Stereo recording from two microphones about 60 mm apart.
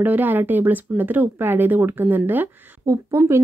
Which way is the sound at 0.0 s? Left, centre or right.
Right.